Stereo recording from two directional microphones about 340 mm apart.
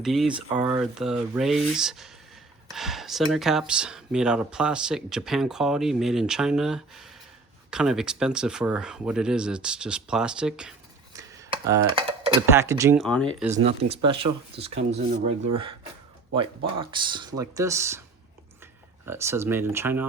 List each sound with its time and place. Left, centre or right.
0.0 s speech: centre
13.6 s speech: right
16.3 s speech: centre